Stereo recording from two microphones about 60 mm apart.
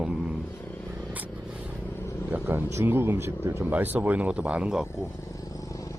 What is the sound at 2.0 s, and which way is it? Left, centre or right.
Vehicle, left.